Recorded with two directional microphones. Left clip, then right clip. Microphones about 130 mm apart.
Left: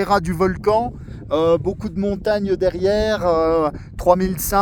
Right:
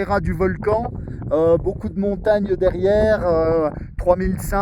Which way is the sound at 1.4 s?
5° left (ahead or behind).